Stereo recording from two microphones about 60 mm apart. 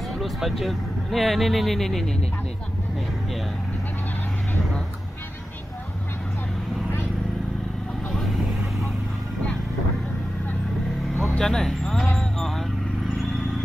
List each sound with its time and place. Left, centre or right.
0.2 s speech: centre
11.3 s speech: centre
12.2 s vehicle: centre